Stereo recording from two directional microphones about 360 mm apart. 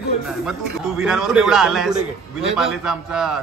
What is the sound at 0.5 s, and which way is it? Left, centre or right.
A man's voice, centre.